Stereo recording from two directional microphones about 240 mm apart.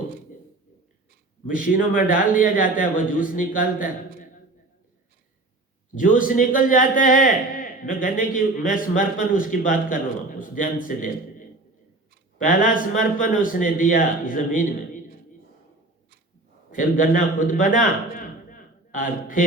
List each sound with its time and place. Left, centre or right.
1.9 s a man's voice: left
5.9 s a man's voice: left
16.7 s a man's voice: left